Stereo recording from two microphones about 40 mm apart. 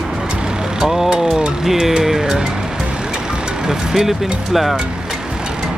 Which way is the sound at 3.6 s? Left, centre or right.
Centre.